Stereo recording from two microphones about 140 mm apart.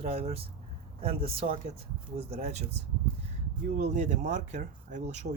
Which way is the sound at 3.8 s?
55° right (ahead or behind).